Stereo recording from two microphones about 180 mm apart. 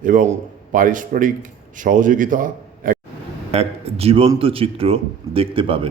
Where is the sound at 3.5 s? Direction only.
35° right (ahead or behind).